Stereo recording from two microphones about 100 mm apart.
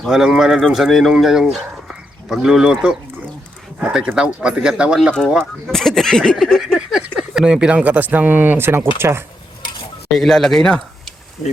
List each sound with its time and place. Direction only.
0.0 s speech: 5° right (ahead or behind)
1.9 s a sound: 5° right (ahead or behind)
3.8 s speech: 10° right (ahead or behind)
5.3 s speech: centre (ahead or behind); by 9.2 s 25° right (ahead or behind)
10.1 s speech: 5° left (ahead or behind)